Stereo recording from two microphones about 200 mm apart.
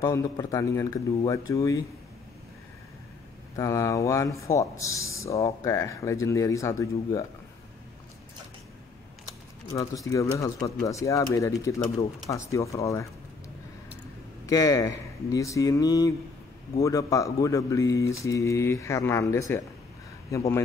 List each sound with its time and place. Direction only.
0.0 s speech: 15° left (ahead or behind)
3.5 s speech: 15° left (ahead or behind)
9.7 s speech: 15° left (ahead or behind)
14.4 s speech: 20° left (ahead or behind)